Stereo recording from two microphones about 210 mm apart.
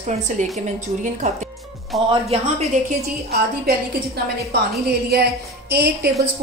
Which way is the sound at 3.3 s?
50° right (ahead or behind).